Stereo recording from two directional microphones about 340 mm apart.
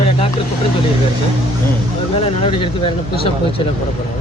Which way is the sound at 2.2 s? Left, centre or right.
Centre.